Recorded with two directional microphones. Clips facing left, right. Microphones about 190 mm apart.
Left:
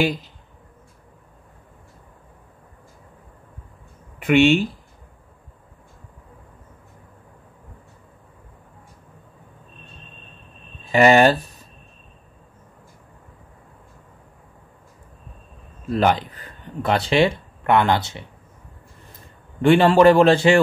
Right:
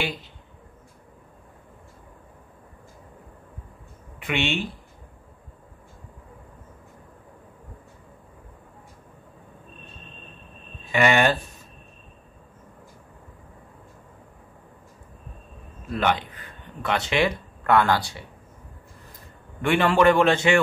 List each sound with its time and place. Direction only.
4.2 s speech: 45° left (ahead or behind)
10.9 s a man's voice: 35° left (ahead or behind)
15.9 s speech: 35° left (ahead or behind); by 18.2 s 20° left (ahead or behind)
19.6 s a man's voice: 30° left (ahead or behind)